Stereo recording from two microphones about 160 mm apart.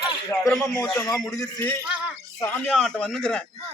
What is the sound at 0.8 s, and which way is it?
Speech, 20° left (ahead or behind).